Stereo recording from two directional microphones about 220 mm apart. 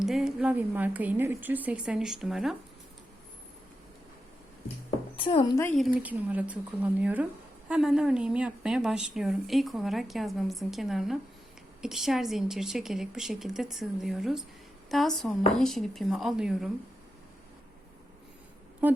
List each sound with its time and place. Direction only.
0.0 s a woman's voice: centre (ahead or behind)
5.1 s a woman's voice: 20° left (ahead or behind)
5.7 s a woman's voice: 5° right (ahead or behind)